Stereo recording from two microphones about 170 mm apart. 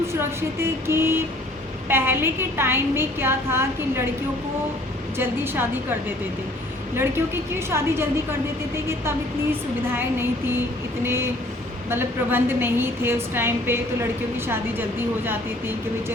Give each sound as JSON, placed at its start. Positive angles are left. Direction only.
{"t": 0.6, "sound": "a woman's voice", "side_deg": -15}
{"t": 5.1, "sound": "a woman's voice", "side_deg": -15}
{"t": 7.7, "sound": "a woman's voice", "side_deg": -15}